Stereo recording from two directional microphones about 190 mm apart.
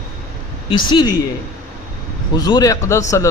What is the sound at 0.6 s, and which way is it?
Speech, 25° left (ahead or behind).